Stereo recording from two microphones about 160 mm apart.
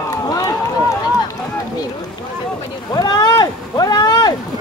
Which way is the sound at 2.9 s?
25° left (ahead or behind).